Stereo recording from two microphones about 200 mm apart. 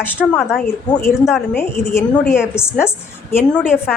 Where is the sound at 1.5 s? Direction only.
10° left (ahead or behind).